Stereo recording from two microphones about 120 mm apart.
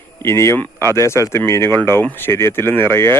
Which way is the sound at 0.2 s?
25° left (ahead or behind).